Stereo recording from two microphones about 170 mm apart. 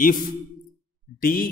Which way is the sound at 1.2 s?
60° left (ahead or behind).